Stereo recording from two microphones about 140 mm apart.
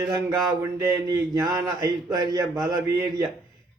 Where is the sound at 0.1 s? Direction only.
20° right (ahead or behind).